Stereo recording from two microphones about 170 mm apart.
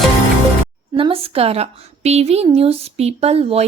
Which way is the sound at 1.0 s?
35° right (ahead or behind).